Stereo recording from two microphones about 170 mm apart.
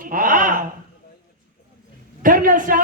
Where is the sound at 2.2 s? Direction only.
55° right (ahead or behind).